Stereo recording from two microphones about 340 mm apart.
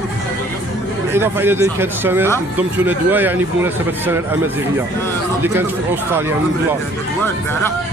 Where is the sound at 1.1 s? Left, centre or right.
Centre.